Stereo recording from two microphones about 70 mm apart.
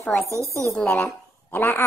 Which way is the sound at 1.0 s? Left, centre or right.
Left.